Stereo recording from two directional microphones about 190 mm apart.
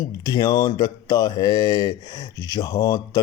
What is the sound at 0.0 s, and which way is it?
Speech, 20° left (ahead or behind).